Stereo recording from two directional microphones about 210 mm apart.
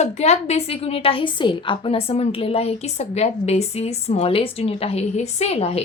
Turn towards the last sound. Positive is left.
turn(degrees=30)  # may be behind; listen again after turning